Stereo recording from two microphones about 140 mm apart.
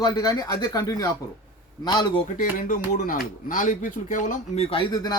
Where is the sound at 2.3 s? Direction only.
75° left (ahead or behind).